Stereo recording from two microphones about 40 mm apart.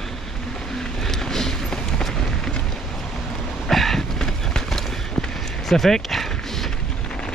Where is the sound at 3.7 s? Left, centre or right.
Centre.